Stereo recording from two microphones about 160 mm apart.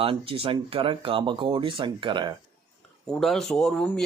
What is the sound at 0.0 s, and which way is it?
Speech, 35° right (ahead or behind).